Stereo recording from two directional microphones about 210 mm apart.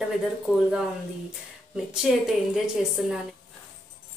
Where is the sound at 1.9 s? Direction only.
Centre (ahead or behind).